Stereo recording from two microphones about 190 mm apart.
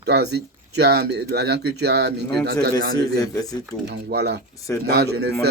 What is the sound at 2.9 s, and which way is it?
Speech, 20° left (ahead or behind).